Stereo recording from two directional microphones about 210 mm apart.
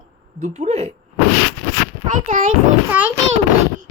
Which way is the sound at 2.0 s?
40° right (ahead or behind).